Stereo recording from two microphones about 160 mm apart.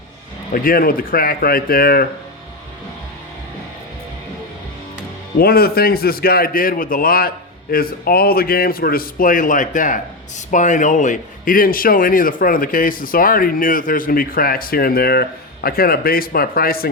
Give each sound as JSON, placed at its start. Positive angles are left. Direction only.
{"t": 0.5, "sound": "speech", "side_deg": 65}
{"t": 5.4, "sound": "a man's voice", "side_deg": 70}